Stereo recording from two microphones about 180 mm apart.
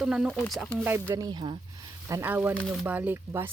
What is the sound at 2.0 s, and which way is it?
Speech, 15° right (ahead or behind).